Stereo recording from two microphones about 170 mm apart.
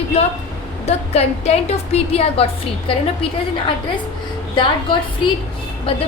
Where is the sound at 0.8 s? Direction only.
40° left (ahead or behind).